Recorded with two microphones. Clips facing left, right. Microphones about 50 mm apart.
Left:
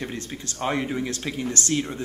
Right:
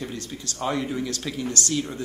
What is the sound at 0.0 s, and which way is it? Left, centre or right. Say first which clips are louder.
Speech: left 1 dB; left.